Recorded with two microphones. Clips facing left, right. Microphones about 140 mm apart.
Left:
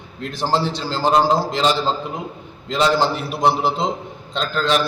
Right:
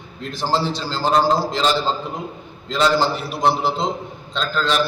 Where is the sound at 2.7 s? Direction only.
20° left (ahead or behind).